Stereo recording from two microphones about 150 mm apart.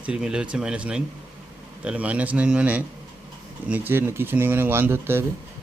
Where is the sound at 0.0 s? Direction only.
5° right (ahead or behind).